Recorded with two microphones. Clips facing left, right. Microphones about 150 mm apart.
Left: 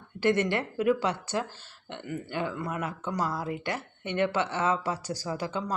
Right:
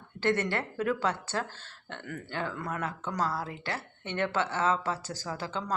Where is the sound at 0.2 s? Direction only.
15° left (ahead or behind).